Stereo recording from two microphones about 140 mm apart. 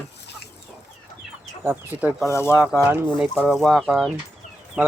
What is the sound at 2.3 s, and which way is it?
Speech, 20° left (ahead or behind).